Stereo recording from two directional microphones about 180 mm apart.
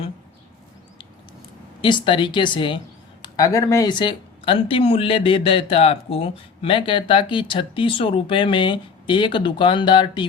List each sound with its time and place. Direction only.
1.8 s speech: 25° left (ahead or behind)